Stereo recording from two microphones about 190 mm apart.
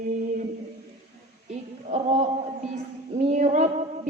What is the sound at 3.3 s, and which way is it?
Female singing, 40° right (ahead or behind).